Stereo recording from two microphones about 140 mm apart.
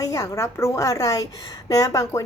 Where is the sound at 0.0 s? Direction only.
25° left (ahead or behind).